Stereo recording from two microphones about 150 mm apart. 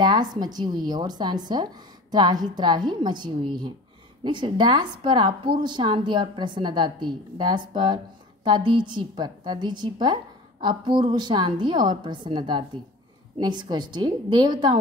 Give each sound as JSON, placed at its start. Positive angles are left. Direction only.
{"t": 0.0, "sound": "a woman's voice", "side_deg": -30}